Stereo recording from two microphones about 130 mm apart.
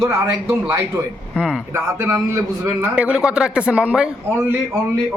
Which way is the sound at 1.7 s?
20° right (ahead or behind).